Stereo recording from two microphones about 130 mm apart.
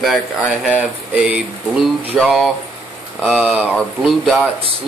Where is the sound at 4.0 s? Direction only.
Centre (ahead or behind).